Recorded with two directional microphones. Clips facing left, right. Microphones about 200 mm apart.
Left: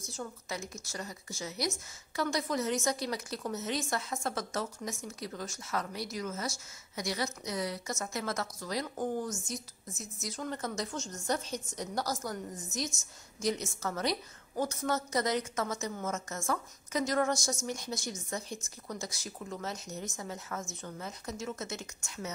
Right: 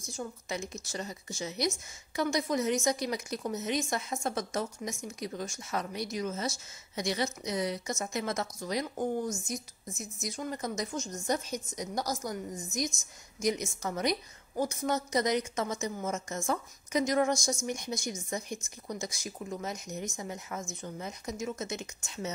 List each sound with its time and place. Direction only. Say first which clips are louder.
0.1 s a woman's voice: right 3 dB; 15° right (ahead or behind)